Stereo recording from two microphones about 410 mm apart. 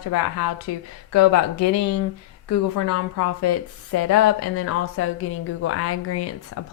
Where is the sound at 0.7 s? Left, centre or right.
Left.